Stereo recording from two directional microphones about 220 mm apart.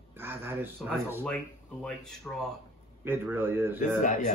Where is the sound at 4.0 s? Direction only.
35° left (ahead or behind).